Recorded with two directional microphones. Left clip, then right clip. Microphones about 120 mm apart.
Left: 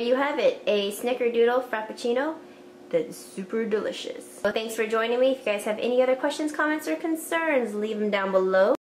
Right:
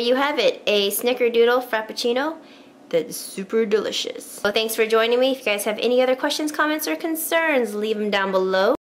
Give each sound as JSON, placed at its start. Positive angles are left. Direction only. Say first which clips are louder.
{"t": 0.0, "sound": "a woman's voice", "louder": "right 4 dB", "side_deg": -40}